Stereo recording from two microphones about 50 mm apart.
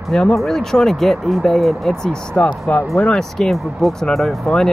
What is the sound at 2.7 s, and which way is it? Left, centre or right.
Speech, left.